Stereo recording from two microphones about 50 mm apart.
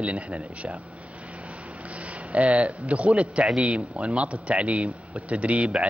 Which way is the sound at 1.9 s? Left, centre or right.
Right.